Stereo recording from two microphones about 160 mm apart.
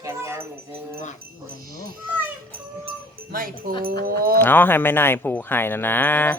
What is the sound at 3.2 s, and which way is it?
Speech, 65° right (ahead or behind).